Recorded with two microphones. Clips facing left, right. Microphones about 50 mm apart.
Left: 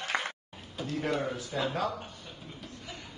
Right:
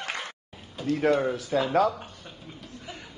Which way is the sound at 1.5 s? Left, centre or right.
Right.